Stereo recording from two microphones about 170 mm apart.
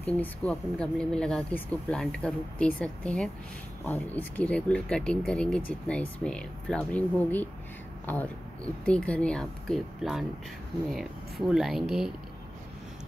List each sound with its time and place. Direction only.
0.2 s speech: 5° left (ahead or behind)